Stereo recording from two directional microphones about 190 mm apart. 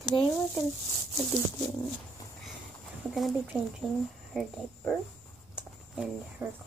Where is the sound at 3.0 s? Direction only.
Centre (ahead or behind).